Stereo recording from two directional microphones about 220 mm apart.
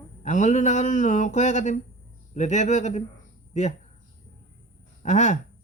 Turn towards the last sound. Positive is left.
turn(degrees=35)  # may be behind; listen again after turning